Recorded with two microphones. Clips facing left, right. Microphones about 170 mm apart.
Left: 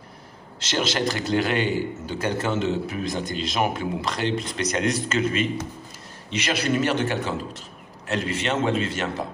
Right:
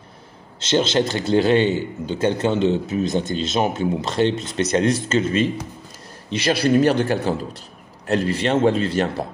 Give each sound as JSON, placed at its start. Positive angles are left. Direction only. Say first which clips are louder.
{"t": 0.6, "sound": "a man's voice", "louder": "right 6 dB", "side_deg": -25}